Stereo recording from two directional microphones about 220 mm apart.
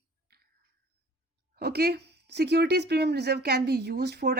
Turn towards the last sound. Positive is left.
turn(degrees=-50)  # may be behind; listen again after turning